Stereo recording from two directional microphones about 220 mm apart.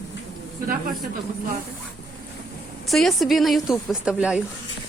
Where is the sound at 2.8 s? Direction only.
Centre (ahead or behind).